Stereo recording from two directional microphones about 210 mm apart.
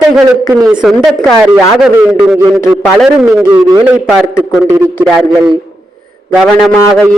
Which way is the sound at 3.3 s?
10° right (ahead or behind).